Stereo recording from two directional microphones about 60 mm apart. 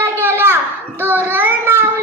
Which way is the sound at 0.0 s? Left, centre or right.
Right.